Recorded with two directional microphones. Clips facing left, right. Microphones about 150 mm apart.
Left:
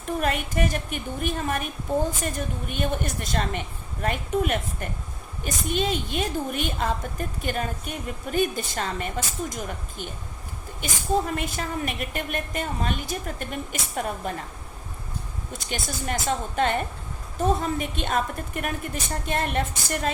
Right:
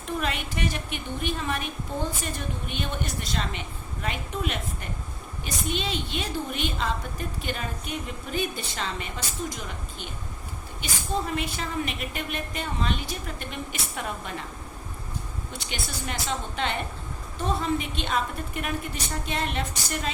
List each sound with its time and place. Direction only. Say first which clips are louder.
0.2 s a woman's voice: left 5 dB; 45° left (ahead or behind)
11.3 s a woman's voice: left 1 dB; 45° left (ahead or behind)
15.5 s a woman's voice: left 4 dB; 45° left (ahead or behind)